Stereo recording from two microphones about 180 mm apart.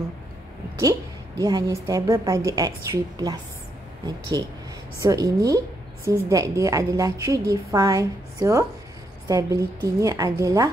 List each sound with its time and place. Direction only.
1.4 s a woman's voice: 20° right (ahead or behind)